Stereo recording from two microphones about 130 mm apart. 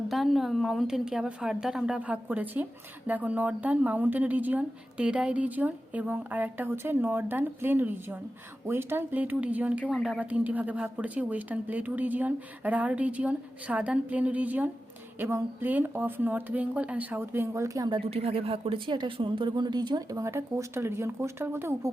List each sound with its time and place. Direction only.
0.1 s a woman's voice: centre (ahead or behind); by 17.8 s 20° right (ahead or behind)
17.8 s speech: 45° right (ahead or behind); by 21.8 s 20° right (ahead or behind)